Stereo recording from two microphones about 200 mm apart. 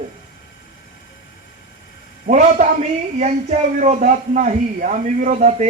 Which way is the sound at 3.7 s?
35° right (ahead or behind).